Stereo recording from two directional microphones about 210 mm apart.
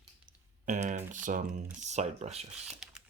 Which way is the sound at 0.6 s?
35° right (ahead or behind).